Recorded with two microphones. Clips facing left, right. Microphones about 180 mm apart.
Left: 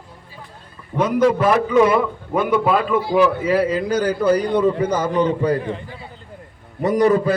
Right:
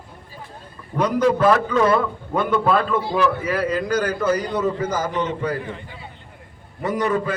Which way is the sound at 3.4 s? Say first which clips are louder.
Left 4 dB; 25° left (ahead or behind).